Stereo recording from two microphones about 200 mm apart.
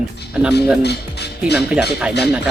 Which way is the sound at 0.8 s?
55° left (ahead or behind).